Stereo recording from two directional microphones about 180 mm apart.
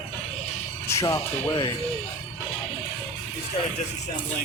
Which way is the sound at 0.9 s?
15° left (ahead or behind).